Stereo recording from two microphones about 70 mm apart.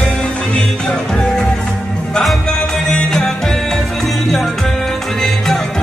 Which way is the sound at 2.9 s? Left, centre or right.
Centre.